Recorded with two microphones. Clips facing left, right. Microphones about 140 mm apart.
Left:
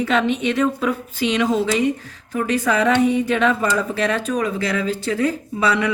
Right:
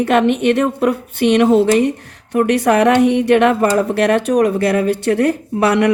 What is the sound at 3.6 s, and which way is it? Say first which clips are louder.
A woman's voice: right 7 dB; 55° right (ahead or behind).